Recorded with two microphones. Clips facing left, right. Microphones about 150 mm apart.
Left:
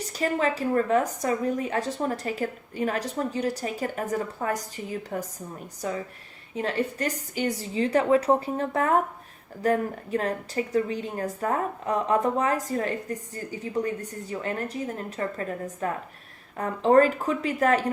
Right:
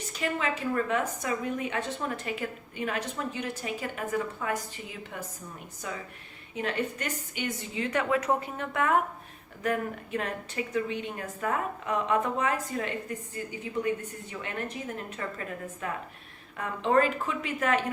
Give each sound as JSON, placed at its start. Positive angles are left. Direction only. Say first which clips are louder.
{"t": 0.1, "sound": "a woman's voice", "louder": "left 5 dB", "side_deg": 40}